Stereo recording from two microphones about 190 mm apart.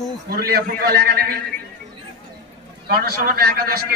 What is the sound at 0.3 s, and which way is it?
Speech, 55° right (ahead or behind).